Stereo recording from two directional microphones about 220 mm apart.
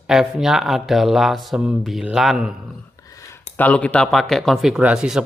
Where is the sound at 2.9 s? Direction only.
15° left (ahead or behind).